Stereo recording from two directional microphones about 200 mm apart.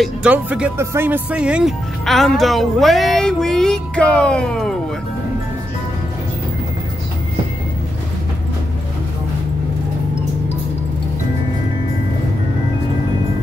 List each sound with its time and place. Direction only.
0.0 s speech: 5° right (ahead or behind)